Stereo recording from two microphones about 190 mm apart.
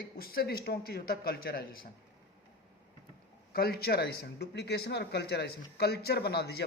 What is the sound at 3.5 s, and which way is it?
A man's voice, 55° left (ahead or behind).